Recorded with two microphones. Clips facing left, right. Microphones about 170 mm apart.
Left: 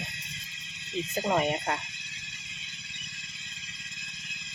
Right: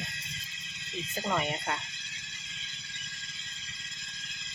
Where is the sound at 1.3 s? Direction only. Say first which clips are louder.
Left 5 dB; 35° left (ahead or behind).